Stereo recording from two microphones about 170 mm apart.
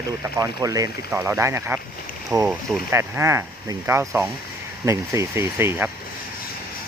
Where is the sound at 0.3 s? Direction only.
20° right (ahead or behind).